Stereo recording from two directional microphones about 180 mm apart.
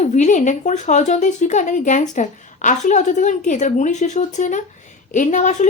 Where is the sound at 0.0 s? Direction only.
45° left (ahead or behind).